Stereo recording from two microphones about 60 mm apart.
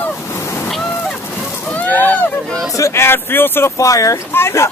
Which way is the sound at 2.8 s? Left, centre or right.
Left.